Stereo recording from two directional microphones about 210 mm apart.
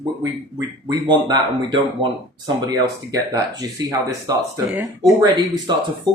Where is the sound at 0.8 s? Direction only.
20° right (ahead or behind).